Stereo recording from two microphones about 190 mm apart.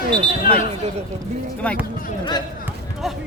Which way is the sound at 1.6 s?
5° left (ahead or behind).